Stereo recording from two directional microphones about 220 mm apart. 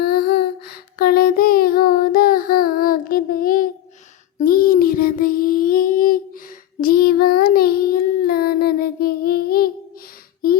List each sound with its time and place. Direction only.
0.0 s child singing: 45° left (ahead or behind)